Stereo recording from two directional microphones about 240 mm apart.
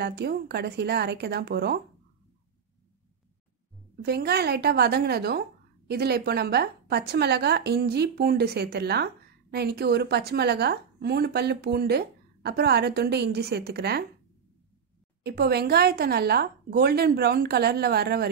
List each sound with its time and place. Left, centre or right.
0.0 s a woman's voice: right
4.0 s a woman's voice: right
15.2 s a woman's voice: right